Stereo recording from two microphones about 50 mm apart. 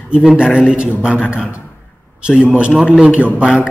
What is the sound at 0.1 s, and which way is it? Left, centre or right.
A man's voice, centre.